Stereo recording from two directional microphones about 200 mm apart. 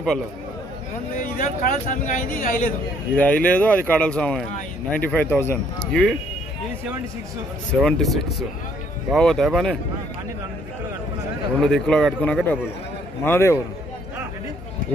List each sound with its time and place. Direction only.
1.2 s a man's voice: 45° left (ahead or behind)
3.2 s speech: 5° left (ahead or behind)
7.8 s a man's voice: centre (ahead or behind)
11.6 s a man's voice: centre (ahead or behind)